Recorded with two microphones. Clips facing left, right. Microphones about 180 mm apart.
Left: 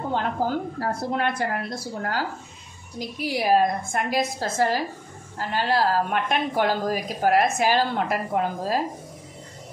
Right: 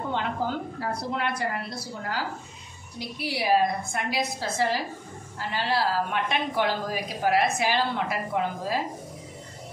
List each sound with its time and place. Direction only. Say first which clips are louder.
0.1 s a woman's voice: left 4 dB; 40° left (ahead or behind)